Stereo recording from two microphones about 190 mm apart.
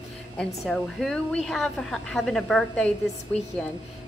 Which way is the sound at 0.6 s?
Centre (ahead or behind).